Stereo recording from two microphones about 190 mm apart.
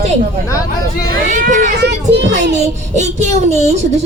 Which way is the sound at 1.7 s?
60° right (ahead or behind).